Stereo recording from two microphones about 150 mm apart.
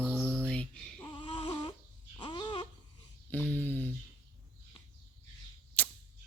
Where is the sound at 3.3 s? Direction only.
10° left (ahead or behind).